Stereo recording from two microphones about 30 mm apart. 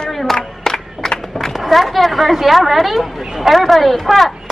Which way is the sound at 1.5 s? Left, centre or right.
Centre.